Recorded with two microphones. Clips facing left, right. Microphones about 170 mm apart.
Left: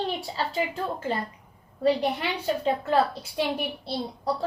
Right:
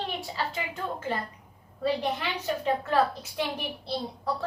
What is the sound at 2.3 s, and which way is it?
A woman's voice, 30° left (ahead or behind).